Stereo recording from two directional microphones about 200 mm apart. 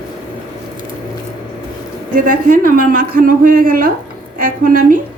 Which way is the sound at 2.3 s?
45° right (ahead or behind).